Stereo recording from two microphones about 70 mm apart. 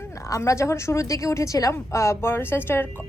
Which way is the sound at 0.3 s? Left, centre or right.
Left.